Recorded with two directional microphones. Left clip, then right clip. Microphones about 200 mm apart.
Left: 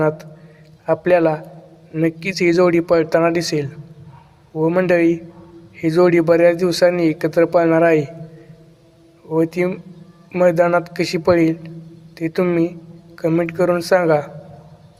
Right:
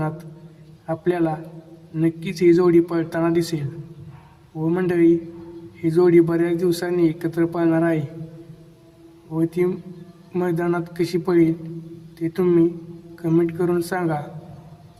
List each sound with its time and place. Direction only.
0.9 s a man's voice: 30° left (ahead or behind)
9.3 s a man's voice: 30° left (ahead or behind)